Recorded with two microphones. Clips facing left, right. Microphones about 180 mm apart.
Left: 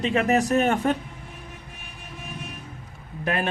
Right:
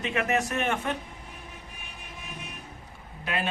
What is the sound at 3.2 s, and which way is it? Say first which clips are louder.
Speech: left 5 dB; 50° left (ahead or behind).